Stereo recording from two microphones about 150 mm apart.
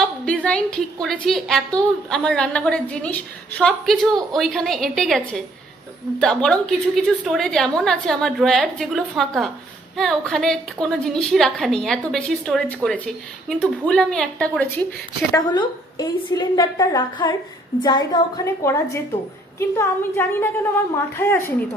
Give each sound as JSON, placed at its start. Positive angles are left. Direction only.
{"t": 0.4, "sound": "a woman's voice", "side_deg": 5}
{"t": 15.4, "sound": "a woman's voice", "side_deg": 30}